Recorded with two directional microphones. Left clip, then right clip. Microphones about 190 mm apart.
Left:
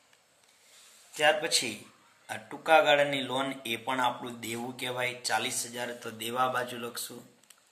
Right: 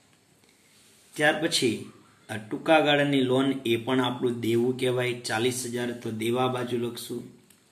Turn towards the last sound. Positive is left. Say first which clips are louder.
# right 5 dB
turn(degrees=30)  # may be behind; listen again after turning